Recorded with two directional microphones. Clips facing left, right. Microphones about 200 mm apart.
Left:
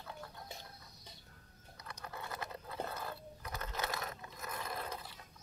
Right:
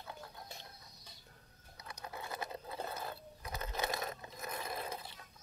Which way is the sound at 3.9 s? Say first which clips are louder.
Right 2 dB; 20° right (ahead or behind).